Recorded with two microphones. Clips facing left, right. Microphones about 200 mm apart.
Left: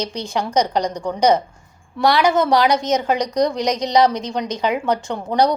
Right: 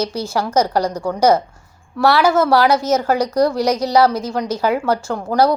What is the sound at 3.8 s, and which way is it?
A woman's voice, 15° left (ahead or behind).